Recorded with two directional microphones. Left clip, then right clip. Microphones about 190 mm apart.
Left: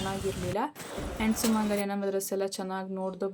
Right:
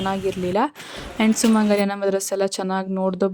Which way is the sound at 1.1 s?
45° right (ahead or behind).